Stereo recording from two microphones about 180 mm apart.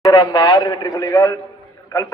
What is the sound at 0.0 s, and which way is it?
A man's voice, 25° left (ahead or behind).